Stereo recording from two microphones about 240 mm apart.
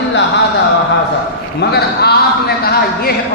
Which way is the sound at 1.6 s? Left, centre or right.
Left.